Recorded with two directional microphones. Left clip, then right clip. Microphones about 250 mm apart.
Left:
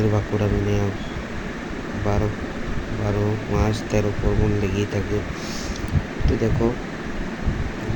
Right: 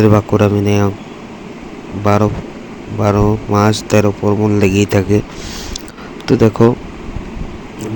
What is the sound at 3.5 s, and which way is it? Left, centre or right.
A man's voice, right.